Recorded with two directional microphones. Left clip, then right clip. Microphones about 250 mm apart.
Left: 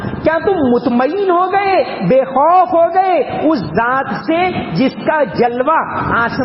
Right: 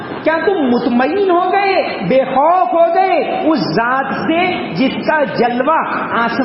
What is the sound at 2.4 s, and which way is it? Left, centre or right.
A man's voice, left.